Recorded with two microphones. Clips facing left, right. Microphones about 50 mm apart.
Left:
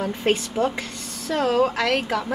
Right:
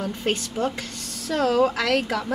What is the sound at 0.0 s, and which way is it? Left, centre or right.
A woman's voice, centre.